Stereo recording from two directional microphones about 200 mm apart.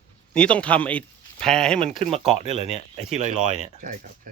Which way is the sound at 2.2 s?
35° right (ahead or behind).